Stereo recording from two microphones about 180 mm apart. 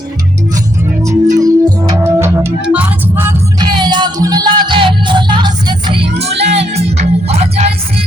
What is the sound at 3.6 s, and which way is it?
Music, 25° right (ahead or behind).